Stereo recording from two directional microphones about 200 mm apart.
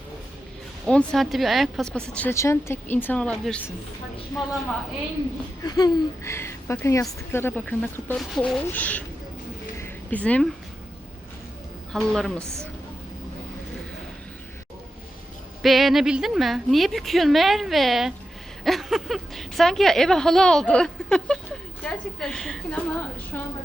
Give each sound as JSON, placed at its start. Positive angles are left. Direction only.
{"t": 0.9, "sound": "speech", "side_deg": 5}
{"t": 5.6, "sound": "speech", "side_deg": 20}
{"t": 9.7, "sound": "a sound", "side_deg": 10}
{"t": 11.9, "sound": "speech", "side_deg": 5}
{"t": 15.6, "sound": "speech", "side_deg": 0}